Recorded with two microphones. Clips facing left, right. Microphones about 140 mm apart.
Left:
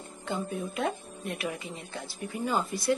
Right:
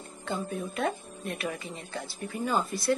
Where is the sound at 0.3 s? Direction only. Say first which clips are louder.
Even; 15° left (ahead or behind).